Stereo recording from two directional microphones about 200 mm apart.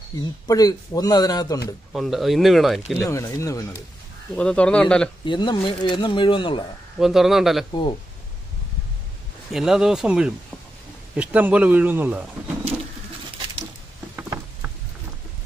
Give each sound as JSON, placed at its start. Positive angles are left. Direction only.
{"t": 0.1, "sound": "speech", "side_deg": 20}
{"t": 1.9, "sound": "speech", "side_deg": 0}
{"t": 3.0, "sound": "speech", "side_deg": 15}
{"t": 4.4, "sound": "speech", "side_deg": 5}
{"t": 5.2, "sound": "speech", "side_deg": 25}
{"t": 7.0, "sound": "speech", "side_deg": 0}
{"t": 9.5, "sound": "speech", "side_deg": 0}
{"t": 14.1, "sound": "patter", "side_deg": -10}